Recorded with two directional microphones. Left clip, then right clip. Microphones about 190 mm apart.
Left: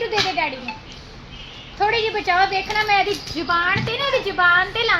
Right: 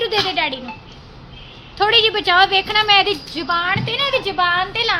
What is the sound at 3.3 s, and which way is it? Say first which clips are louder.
A child's voice: left 1 dB; 10° right (ahead or behind).